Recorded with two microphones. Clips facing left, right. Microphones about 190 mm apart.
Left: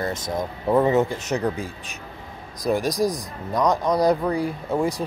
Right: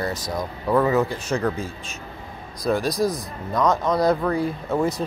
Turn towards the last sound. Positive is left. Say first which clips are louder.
# right 1 dB
turn(degrees=10)  # may be behind; listen again after turning